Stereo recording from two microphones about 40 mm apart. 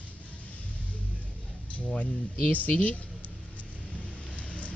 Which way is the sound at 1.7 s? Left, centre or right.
Left.